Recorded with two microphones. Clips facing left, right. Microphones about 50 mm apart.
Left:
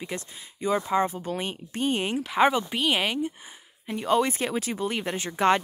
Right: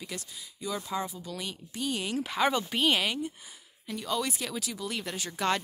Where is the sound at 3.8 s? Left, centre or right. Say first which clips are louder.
Left 8 dB; left.